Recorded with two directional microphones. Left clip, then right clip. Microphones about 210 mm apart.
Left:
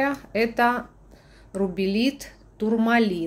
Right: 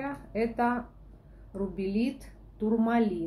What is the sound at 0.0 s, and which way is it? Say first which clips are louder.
A woman's voice: left 9 dB; 40° left (ahead or behind).